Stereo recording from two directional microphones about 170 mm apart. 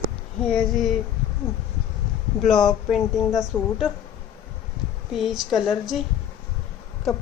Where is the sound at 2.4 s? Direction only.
Centre (ahead or behind).